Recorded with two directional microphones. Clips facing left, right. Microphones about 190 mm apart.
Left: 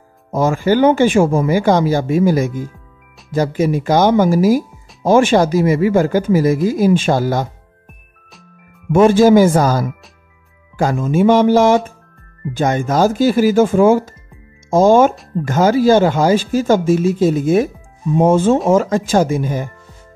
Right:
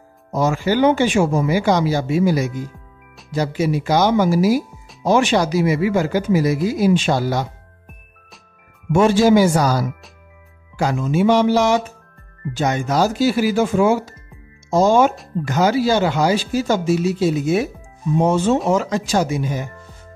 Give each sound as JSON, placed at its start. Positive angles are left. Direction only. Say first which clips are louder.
{"t": 0.3, "sound": "speech", "louder": "left 4 dB", "side_deg": 50}
{"t": 8.9, "sound": "speech", "louder": "left 4 dB", "side_deg": 50}